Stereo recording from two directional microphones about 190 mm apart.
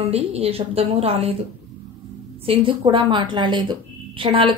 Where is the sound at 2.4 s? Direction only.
30° right (ahead or behind).